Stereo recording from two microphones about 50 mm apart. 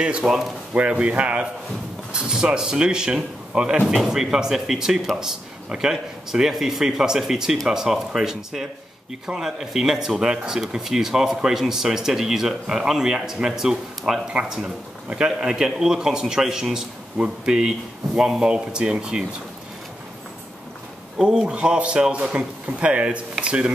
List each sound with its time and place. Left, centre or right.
0.0 s a man's voice: centre
2.2 s speech: centre
3.8 s speech: centre
21.2 s a man's voice: centre